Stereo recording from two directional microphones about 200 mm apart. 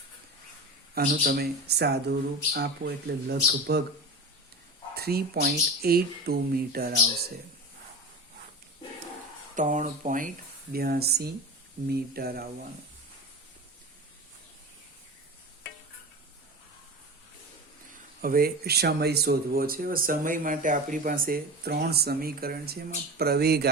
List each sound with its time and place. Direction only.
0.9 s speech: 50° right (ahead or behind)
4.9 s speech: 50° right (ahead or behind)
9.6 s speech: 40° right (ahead or behind)
18.2 s speech: 45° right (ahead or behind)